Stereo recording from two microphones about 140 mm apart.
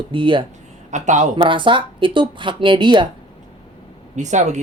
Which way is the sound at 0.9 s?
60° right (ahead or behind).